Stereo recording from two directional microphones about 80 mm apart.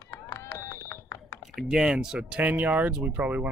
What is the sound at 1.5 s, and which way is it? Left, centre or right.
Speech, centre.